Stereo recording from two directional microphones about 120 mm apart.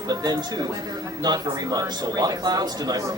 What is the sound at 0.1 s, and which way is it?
A man's voice, 35° right (ahead or behind).